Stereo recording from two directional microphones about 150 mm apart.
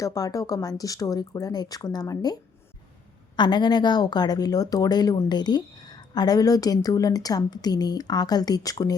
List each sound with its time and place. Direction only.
0.0 s a woman's voice: 25° left (ahead or behind)